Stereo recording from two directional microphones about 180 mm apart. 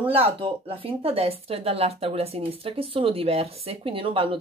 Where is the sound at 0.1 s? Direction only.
30° right (ahead or behind).